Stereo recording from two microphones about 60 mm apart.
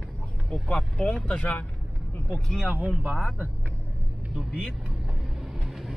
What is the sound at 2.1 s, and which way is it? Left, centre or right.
Vehicle, left.